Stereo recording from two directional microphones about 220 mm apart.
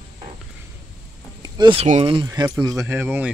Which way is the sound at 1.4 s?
20° right (ahead or behind).